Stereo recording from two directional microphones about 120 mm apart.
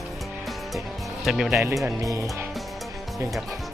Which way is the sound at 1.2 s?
Centre (ahead or behind).